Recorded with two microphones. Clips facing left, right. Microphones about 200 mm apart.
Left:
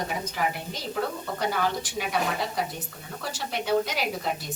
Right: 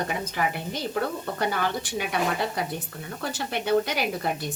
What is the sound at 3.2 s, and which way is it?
A woman's voice, 60° right (ahead or behind).